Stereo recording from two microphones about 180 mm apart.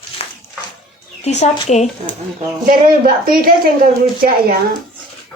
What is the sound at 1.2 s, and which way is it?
Speech, 40° left (ahead or behind).